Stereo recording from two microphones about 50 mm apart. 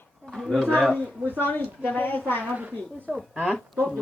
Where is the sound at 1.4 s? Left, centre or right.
Left.